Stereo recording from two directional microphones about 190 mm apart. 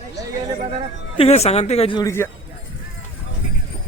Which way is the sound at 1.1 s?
35° left (ahead or behind).